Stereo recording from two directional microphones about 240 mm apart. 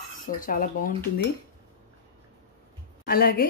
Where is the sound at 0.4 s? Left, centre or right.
Left.